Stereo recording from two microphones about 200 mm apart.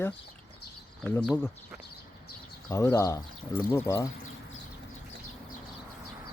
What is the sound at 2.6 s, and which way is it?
Speech, 15° left (ahead or behind).